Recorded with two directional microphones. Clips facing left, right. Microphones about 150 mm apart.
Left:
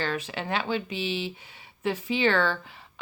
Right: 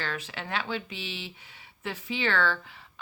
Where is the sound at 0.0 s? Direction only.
20° left (ahead or behind).